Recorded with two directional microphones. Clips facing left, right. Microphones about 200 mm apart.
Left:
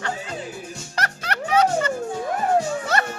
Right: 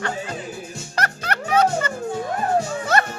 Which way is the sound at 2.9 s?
50° right (ahead or behind).